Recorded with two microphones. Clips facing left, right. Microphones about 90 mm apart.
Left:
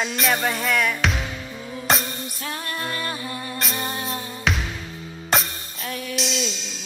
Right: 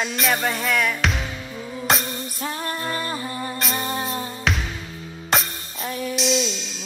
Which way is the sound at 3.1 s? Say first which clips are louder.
Right 3 dB; 50° right (ahead or behind).